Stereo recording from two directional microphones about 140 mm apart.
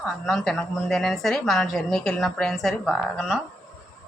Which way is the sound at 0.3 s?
Centre (ahead or behind).